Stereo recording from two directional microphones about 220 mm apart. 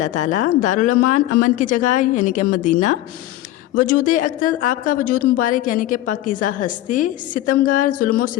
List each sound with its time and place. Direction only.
0.0 s a woman's voice: 35° left (ahead or behind)